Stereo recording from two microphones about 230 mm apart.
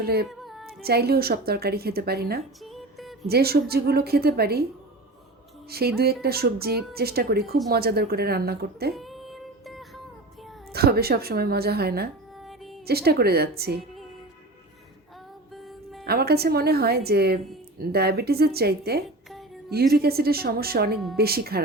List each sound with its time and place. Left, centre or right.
0.0 s a woman's voice: right
0.3 s child singing: centre
0.7 s a woman's voice: right
2.6 s music: centre
3.2 s a woman's voice: right
5.7 s a woman's voice: right
9.0 s music: centre
10.7 s a woman's voice: right
12.4 s music: centre
12.8 s a woman's voice: right
15.5 s music: centre
16.0 s a woman's voice: right